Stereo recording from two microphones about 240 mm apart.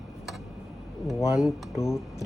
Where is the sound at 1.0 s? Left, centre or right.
Centre.